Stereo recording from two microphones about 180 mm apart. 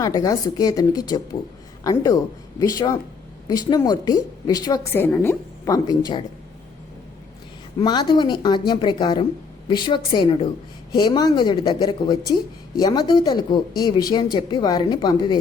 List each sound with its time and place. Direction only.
0.0 s a woman's voice: 20° left (ahead or behind)
7.8 s a woman's voice: 25° left (ahead or behind)